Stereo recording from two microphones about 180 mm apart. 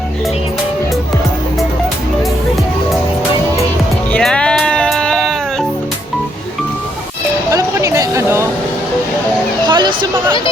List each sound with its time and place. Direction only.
4.1 s music: 5° left (ahead or behind)
7.5 s a sound: 15° right (ahead or behind)
9.6 s music: 25° right (ahead or behind)